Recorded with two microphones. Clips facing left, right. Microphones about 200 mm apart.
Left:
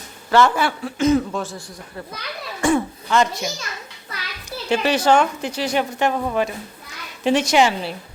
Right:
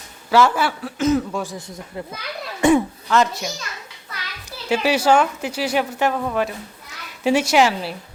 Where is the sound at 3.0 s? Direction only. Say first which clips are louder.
Left 2 dB; centre (ahead or behind).